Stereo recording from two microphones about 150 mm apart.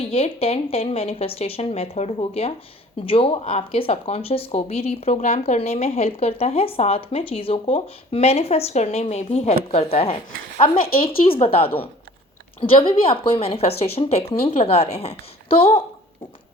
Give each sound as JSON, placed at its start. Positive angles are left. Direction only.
{"t": 0.0, "sound": "speech", "side_deg": 40}
{"t": 11.3, "sound": "speech", "side_deg": 40}